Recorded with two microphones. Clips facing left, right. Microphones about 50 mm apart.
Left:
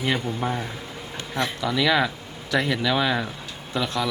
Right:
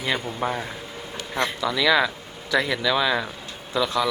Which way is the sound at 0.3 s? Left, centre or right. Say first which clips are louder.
Even; right.